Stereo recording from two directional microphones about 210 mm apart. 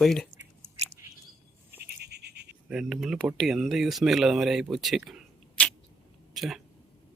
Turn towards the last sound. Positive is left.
turn(degrees=0)  # may be behind; listen again after turning